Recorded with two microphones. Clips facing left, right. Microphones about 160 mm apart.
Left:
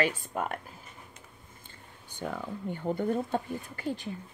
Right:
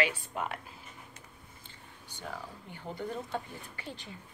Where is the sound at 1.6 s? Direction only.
50° left (ahead or behind).